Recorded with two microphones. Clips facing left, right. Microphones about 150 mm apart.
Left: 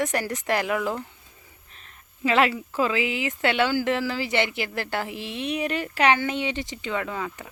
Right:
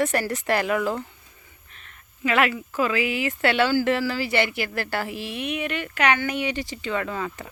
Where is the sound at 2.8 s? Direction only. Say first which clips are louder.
Right 1 dB; 20° left (ahead or behind).